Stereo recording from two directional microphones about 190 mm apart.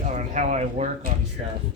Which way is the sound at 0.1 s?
40° right (ahead or behind).